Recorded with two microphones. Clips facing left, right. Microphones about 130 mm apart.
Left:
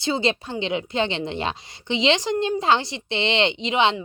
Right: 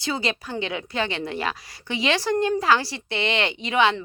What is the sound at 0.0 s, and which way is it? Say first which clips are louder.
A woman's voice: left 4 dB; 25° left (ahead or behind).